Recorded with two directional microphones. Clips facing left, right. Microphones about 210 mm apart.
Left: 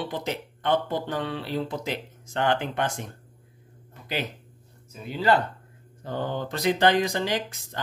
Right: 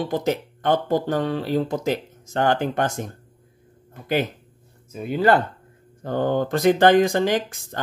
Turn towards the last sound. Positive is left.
turn(degrees=-50)  # may be behind; listen again after turning